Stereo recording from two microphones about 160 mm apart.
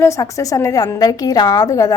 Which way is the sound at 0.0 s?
20° left (ahead or behind).